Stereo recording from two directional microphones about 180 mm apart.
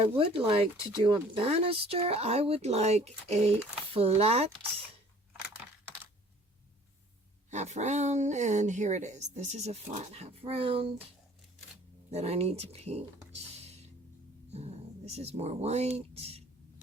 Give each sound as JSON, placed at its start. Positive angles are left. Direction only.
{"t": 0.2, "sound": "speech", "side_deg": -30}
{"t": 7.5, "sound": "speech", "side_deg": -40}
{"t": 12.1, "sound": "speech", "side_deg": -35}